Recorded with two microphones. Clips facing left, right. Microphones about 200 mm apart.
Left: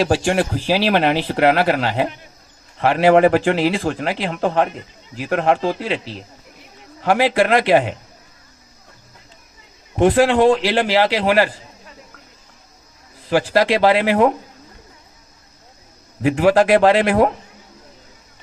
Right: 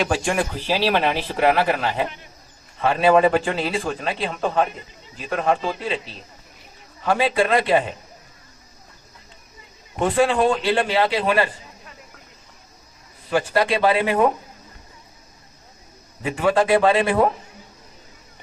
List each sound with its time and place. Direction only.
0.0 s speech: 30° left (ahead or behind)
0.6 s a man's voice: 90° left
5.8 s a man's voice: 90° left
10.0 s a man's voice: 90° left
13.2 s a man's voice: 90° left
16.2 s a man's voice: 90° left